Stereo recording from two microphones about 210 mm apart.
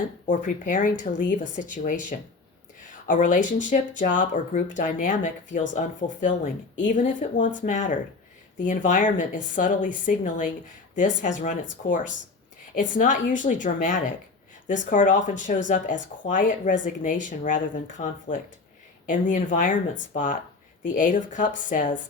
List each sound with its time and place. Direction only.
0.3 s speech: 40° left (ahead or behind)